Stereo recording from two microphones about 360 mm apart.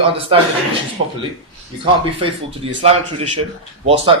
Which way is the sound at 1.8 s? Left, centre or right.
Centre.